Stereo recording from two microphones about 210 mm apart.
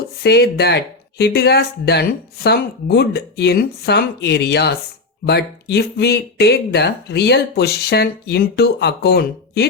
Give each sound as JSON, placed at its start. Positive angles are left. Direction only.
{"t": 0.2, "sound": "speech", "side_deg": 50}